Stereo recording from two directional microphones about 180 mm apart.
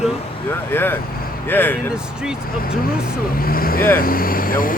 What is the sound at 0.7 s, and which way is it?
Speech, 10° left (ahead or behind).